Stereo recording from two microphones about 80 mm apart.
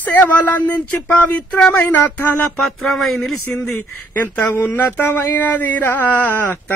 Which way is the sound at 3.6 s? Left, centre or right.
Left.